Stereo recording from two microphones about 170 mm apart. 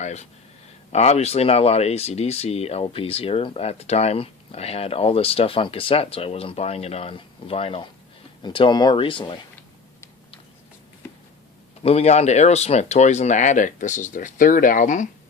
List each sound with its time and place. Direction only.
0.0 s speech: 40° left (ahead or behind)
11.8 s speech: 35° left (ahead or behind)